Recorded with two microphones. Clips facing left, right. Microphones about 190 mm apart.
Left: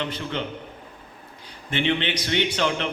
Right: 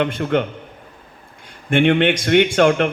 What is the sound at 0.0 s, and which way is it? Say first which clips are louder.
Speech: right 10 dB; 55° right (ahead or behind).